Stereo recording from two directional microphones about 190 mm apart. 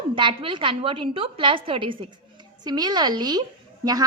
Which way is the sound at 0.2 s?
25° right (ahead or behind).